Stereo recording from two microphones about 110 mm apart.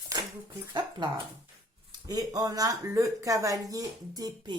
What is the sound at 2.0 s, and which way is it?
Speech, 35° right (ahead or behind).